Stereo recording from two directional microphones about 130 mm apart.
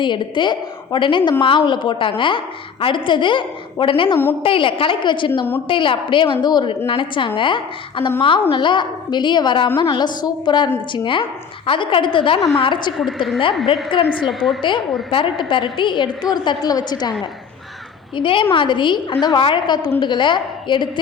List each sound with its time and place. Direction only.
0.0 s a woman's voice: 35° left (ahead or behind)
13.9 s a woman's voice: 40° left (ahead or behind)
14.3 s a woman's voice: centre (ahead or behind)
15.1 s a woman's voice: 40° left (ahead or behind)
18.2 s a woman's voice: 40° left (ahead or behind)